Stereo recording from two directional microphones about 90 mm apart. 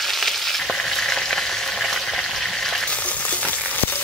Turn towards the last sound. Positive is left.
turn(degrees=20)  # may be behind; listen again after turning